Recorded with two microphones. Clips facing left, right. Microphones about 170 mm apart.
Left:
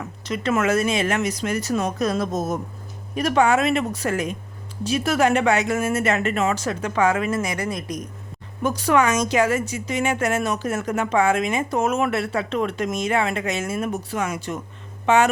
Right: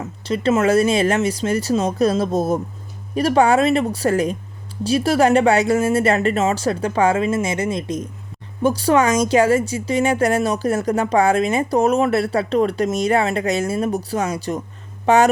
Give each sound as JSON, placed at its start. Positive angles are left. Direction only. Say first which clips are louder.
{"t": 0.0, "sound": "speech", "louder": "right 6 dB", "side_deg": -30}